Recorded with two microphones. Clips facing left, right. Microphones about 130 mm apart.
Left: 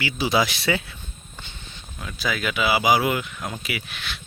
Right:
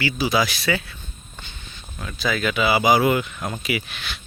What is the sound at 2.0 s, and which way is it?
Speech, 5° left (ahead or behind).